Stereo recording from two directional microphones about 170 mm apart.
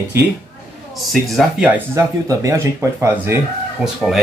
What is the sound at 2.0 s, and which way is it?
Speech, 20° right (ahead or behind).